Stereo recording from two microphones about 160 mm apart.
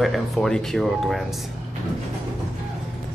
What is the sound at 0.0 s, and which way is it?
Speech, centre (ahead or behind).